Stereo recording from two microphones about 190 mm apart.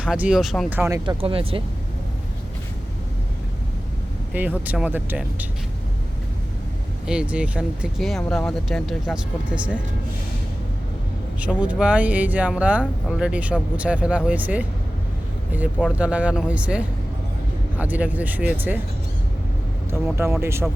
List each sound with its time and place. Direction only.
0.0 s speech: 5° right (ahead or behind)
1.0 s speech: 30° right (ahead or behind)
4.3 s speech: 10° right (ahead or behind)
7.1 s speech: 5° right (ahead or behind)
11.3 s speech: 5° right (ahead or behind)
16.0 s speech: 5° right (ahead or behind)
19.9 s speech: 15° right (ahead or behind)